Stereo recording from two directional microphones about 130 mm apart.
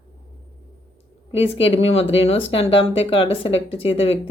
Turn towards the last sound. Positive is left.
turn(degrees=50)  # may be behind; listen again after turning